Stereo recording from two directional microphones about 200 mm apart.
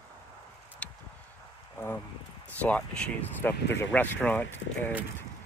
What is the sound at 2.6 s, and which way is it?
Speech, 5° left (ahead or behind).